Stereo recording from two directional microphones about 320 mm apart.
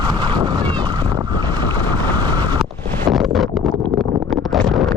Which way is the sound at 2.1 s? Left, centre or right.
Centre.